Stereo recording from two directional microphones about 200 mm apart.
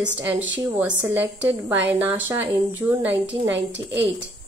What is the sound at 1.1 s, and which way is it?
A woman's voice, 10° right (ahead or behind).